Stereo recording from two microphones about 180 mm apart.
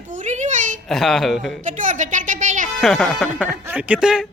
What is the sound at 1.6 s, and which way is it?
A woman's voice, 45° right (ahead or behind).